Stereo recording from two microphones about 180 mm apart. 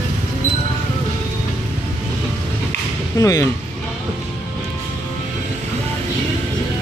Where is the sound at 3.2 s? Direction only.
20° left (ahead or behind).